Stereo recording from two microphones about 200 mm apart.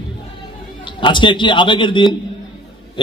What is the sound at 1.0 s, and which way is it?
A man's voice, 25° left (ahead or behind).